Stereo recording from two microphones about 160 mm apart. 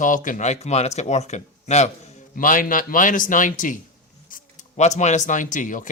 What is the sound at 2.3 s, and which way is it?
Speech, 55° left (ahead or behind).